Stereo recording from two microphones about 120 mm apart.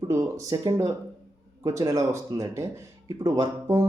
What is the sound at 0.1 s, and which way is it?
Speech, 25° right (ahead or behind).